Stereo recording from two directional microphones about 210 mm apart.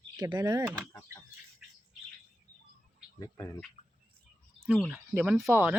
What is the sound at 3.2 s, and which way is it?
Speech, 20° left (ahead or behind).